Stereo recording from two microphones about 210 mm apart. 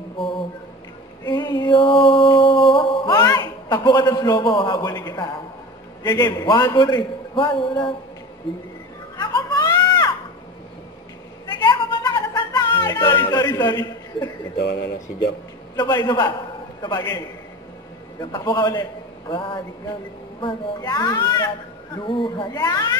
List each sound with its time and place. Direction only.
1.2 s a sound: 20° left (ahead or behind)
3.1 s a man's voice: 15° left (ahead or behind)
9.1 s baby cry: 20° left (ahead or behind)
11.4 s music: 20° left (ahead or behind)
14.6 s speech: 50° left (ahead or behind)
15.8 s a man's voice: 20° left (ahead or behind)
18.2 s a man's voice: 20° left (ahead or behind)